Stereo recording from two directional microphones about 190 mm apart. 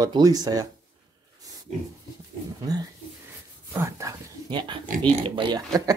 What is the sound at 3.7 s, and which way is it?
Speech, 15° right (ahead or behind).